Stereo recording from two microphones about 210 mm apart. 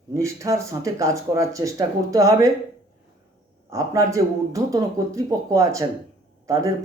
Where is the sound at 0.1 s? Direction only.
15° right (ahead or behind).